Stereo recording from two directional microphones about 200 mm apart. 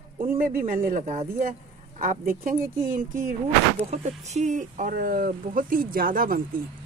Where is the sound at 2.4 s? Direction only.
45° right (ahead or behind).